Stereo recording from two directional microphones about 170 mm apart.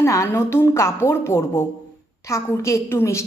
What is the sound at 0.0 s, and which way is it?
A woman's voice, 15° left (ahead or behind).